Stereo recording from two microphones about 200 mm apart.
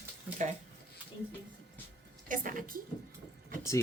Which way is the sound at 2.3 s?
40° right (ahead or behind).